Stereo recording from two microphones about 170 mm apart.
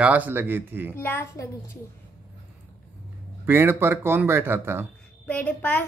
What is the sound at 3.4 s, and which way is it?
A man's voice, 10° right (ahead or behind).